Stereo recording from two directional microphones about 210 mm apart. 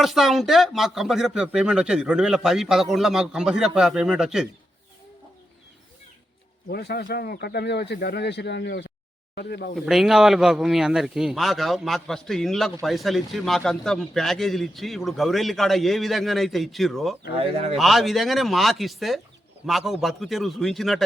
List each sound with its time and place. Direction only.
0.0 s speech: centre (ahead or behind)
6.7 s speech: 50° left (ahead or behind)
9.7 s speech: centre (ahead or behind)
17.3 s speech: 30° right (ahead or behind)
17.7 s speech: centre (ahead or behind)